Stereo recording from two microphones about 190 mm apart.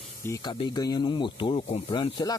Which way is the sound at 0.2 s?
20° left (ahead or behind).